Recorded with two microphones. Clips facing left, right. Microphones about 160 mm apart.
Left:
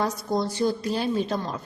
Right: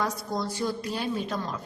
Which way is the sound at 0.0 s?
30° left (ahead or behind).